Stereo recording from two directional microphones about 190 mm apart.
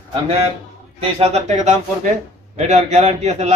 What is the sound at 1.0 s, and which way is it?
A man's voice, 30° right (ahead or behind).